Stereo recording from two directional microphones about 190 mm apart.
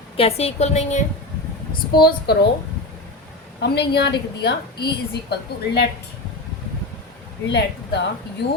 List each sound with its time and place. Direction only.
0.2 s a woman's voice: 30° left (ahead or behind)
1.9 s a woman's voice: 55° left (ahead or behind)
3.6 s a woman's voice: 60° left (ahead or behind)
7.4 s a woman's voice: 65° left (ahead or behind)